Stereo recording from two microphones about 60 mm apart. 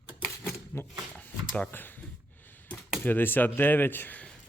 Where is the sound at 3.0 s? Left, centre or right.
Left.